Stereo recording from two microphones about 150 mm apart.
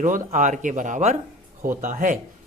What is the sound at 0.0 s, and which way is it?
Speech, 60° right (ahead or behind).